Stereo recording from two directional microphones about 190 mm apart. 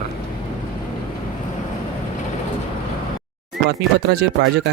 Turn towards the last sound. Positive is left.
turn(degrees=-60)  # may be behind; listen again after turning